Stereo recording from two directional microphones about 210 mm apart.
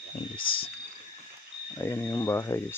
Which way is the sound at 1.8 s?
10° left (ahead or behind).